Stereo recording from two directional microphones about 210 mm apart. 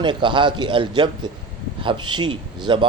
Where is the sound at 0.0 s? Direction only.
20° right (ahead or behind).